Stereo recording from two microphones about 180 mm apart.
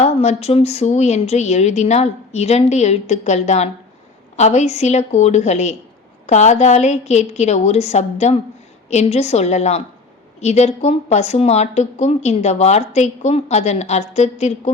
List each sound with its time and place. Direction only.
0.0 s speech: 35° left (ahead or behind)